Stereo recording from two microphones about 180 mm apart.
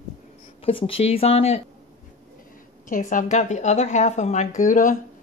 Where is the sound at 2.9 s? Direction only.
45° left (ahead or behind).